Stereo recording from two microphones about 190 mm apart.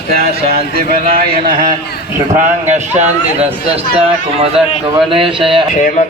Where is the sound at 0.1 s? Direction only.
55° right (ahead or behind).